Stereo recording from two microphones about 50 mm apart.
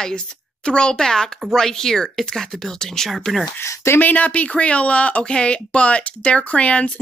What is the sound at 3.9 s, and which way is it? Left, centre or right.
A woman's voice, left.